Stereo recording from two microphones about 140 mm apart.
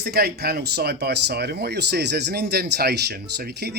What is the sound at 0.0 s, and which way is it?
Speech, 90° right.